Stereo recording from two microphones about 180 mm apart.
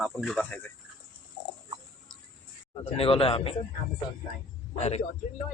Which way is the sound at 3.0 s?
30° left (ahead or behind).